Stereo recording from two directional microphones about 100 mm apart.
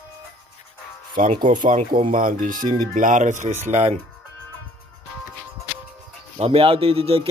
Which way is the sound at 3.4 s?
80° right.